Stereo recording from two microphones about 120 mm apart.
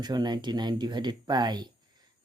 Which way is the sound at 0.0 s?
35° right (ahead or behind).